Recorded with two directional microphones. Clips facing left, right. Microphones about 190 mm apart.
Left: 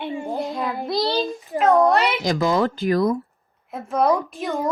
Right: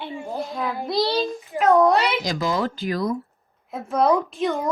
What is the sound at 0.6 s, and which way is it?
Child singing, centre (ahead or behind).